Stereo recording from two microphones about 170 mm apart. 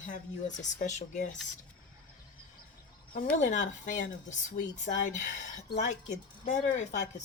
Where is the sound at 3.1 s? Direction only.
45° left (ahead or behind).